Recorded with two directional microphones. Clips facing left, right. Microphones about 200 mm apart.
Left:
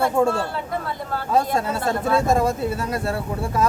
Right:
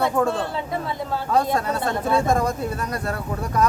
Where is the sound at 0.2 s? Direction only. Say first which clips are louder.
Left 4 dB; 10° left (ahead or behind).